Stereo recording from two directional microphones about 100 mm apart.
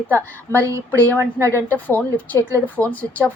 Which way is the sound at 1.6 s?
20° left (ahead or behind).